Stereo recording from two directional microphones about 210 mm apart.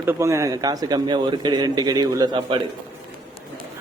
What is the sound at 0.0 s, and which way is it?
A man's voice, 10° right (ahead or behind).